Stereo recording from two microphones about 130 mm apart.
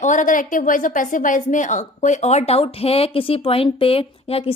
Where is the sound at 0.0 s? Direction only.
75° left (ahead or behind).